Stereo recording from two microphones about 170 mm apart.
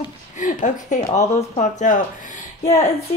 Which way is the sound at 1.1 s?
40° left (ahead or behind).